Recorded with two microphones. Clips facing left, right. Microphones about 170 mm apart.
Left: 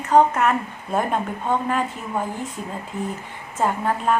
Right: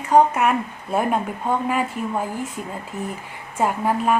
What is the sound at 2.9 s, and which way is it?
Speech, 5° right (ahead or behind).